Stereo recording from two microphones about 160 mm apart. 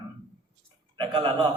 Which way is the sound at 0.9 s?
30° right (ahead or behind).